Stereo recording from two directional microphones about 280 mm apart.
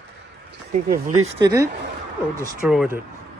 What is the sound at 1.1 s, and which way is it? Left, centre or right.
Speech, right.